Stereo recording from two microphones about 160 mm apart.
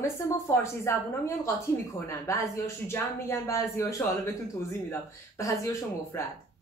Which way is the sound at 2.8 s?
15° left (ahead or behind).